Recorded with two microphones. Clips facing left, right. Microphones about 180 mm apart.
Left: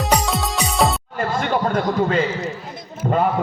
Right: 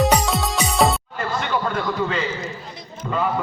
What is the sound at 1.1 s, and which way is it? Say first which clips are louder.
Chatter: left 3 dB; 50° left (ahead or behind).